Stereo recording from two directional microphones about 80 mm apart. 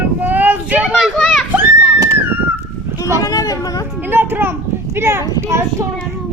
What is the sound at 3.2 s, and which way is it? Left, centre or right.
Speech, left.